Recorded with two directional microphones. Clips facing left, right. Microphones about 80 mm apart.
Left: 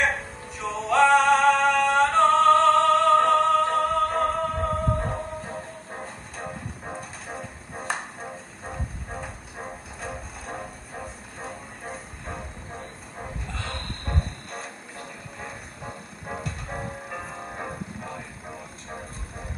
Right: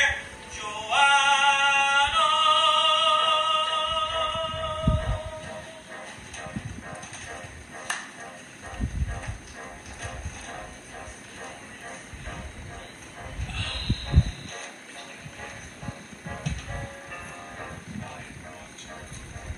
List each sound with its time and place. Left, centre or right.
0.2 s music: left